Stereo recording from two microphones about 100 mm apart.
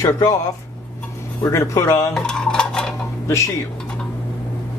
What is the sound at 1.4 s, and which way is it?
Speech, 30° left (ahead or behind).